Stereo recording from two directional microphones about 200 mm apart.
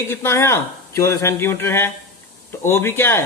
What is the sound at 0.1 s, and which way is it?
Speech, 15° left (ahead or behind).